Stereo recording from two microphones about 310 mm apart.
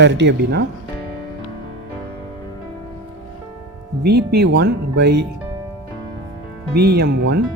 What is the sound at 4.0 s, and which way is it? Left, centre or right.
Speech, right.